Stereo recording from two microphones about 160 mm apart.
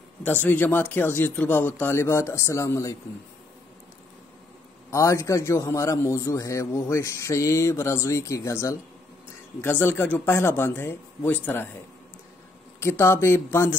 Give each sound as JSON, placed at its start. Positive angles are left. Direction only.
{"t": 0.2, "sound": "speech", "side_deg": 10}
{"t": 4.9, "sound": "a man's voice", "side_deg": 20}
{"t": 12.8, "sound": "speech", "side_deg": 15}